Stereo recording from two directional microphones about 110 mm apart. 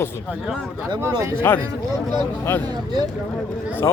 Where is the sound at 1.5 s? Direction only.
20° left (ahead or behind).